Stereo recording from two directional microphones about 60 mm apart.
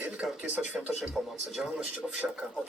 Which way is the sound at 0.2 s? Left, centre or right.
Centre.